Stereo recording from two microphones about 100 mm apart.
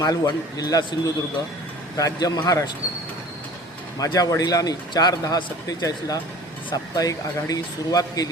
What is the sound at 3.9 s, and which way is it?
A man's voice, 40° left (ahead or behind).